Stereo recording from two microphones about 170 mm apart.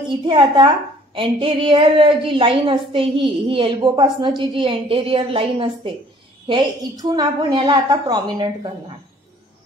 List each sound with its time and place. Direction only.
0.2 s a woman's voice: 25° right (ahead or behind)